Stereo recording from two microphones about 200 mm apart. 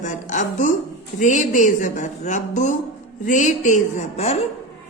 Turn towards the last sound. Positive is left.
turn(degrees=30)  # may be behind; listen again after turning